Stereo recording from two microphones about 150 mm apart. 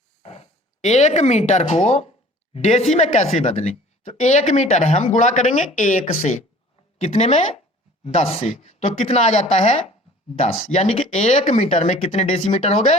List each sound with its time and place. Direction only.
0.2 s speech: 45° left (ahead or behind)